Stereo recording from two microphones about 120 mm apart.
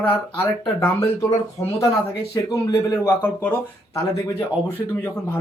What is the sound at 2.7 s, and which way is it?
Speech, 20° left (ahead or behind).